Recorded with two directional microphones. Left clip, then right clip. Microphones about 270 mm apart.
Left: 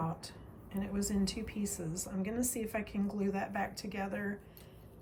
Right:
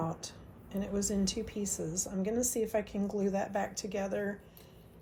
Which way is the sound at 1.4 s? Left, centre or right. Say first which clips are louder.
Right 4 dB; right.